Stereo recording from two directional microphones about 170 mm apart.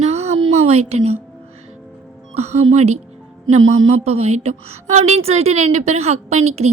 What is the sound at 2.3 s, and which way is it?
A woman's voice, 40° right (ahead or behind).